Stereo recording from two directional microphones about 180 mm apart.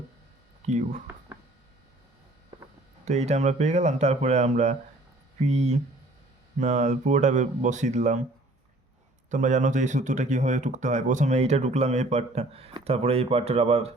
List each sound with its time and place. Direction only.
0.6 s speech: 40° right (ahead or behind)
3.1 s speech: 40° right (ahead or behind)
9.3 s speech: 45° right (ahead or behind)